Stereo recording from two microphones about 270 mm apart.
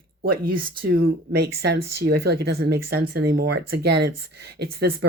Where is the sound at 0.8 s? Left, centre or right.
Right.